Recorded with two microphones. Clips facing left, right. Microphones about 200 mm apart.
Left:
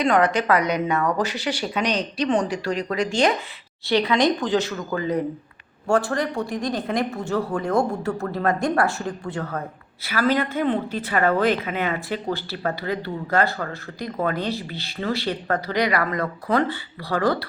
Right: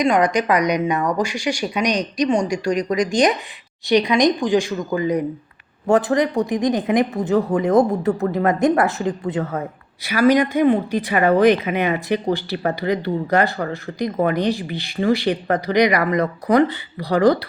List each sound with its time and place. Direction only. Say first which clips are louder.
0.0 s speech: right 2 dB; 15° right (ahead or behind)